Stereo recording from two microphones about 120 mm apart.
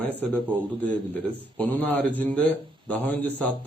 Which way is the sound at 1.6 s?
15° left (ahead or behind).